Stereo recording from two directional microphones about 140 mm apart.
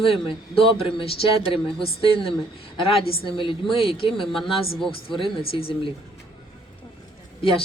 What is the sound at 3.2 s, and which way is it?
Speech, 35° left (ahead or behind).